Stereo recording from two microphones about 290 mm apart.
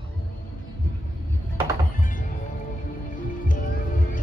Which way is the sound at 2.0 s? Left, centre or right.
Left.